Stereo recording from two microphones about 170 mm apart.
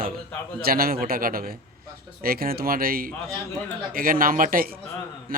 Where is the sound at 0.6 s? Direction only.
60° right (ahead or behind).